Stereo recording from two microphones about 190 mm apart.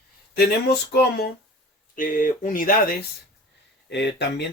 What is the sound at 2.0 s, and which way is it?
Speech, 45° left (ahead or behind).